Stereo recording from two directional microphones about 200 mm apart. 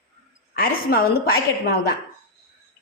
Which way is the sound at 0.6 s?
45° left (ahead or behind).